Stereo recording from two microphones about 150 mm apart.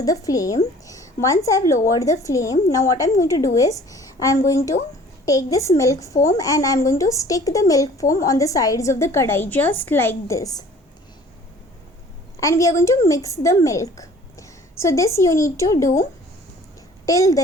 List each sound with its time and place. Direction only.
0.0 s a woman's voice: 25° left (ahead or behind)
12.4 s a woman's voice: 20° left (ahead or behind)
17.1 s a woman's voice: 20° left (ahead or behind)